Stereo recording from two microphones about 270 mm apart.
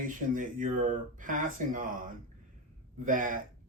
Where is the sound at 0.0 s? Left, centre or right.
Right.